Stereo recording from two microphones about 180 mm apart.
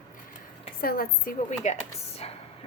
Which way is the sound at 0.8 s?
55° left (ahead or behind).